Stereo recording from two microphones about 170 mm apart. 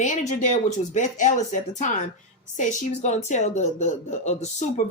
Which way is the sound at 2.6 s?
45° left (ahead or behind).